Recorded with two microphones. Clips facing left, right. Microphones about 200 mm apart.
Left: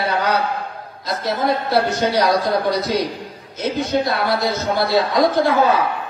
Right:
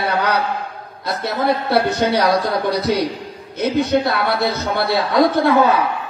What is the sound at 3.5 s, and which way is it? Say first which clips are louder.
A man's voice: right 3 dB; 60° right (ahead or behind).